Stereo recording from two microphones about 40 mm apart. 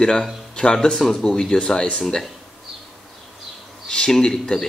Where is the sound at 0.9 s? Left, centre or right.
Centre.